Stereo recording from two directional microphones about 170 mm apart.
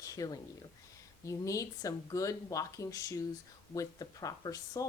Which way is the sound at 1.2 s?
20° left (ahead or behind).